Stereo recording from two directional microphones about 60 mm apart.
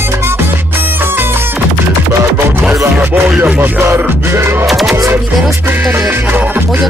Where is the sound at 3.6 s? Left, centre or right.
Right.